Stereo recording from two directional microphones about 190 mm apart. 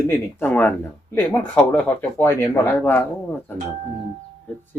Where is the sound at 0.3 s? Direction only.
10° left (ahead or behind).